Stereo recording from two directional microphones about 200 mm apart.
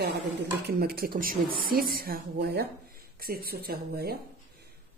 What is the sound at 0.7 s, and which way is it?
A woman's voice, 50° right (ahead or behind).